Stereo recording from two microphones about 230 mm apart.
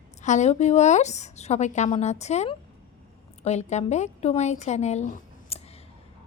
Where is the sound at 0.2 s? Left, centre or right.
Left.